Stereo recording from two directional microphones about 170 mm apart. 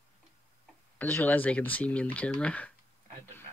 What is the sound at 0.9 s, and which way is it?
Speech, 10° left (ahead or behind).